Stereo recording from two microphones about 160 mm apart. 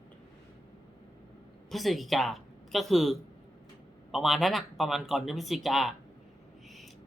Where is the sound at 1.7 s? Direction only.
Centre (ahead or behind).